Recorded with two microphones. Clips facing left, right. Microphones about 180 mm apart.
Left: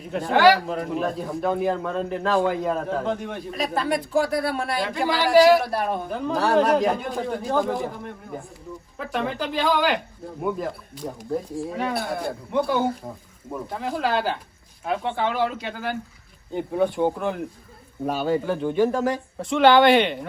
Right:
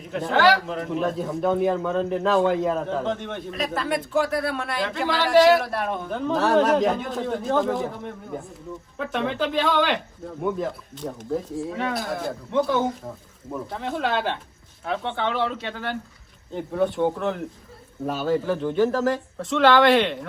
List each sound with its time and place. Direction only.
0.2 s a man's voice: centre (ahead or behind)
5.7 s a man's voice: 35° left (ahead or behind)
6.1 s a man's voice: centre (ahead or behind)
12.5 s a man's voice: 10° left (ahead or behind)
18.0 s a man's voice: centre (ahead or behind)
18.6 s speech: 10° left (ahead or behind)
19.0 s a man's voice: centre (ahead or behind)